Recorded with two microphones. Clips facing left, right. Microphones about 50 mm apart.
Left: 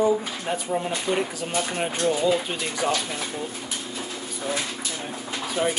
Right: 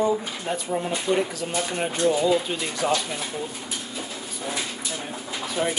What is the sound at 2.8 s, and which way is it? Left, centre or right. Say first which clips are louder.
Speech: right 1 dB; centre.